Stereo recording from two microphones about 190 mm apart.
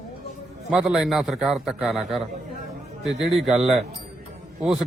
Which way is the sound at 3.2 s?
Centre (ahead or behind).